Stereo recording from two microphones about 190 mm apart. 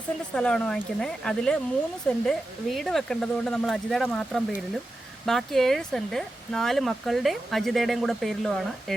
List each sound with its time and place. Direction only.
0.3 s speech: 5° left (ahead or behind)